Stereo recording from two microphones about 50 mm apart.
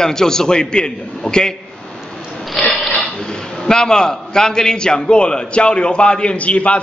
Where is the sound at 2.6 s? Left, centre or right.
Centre.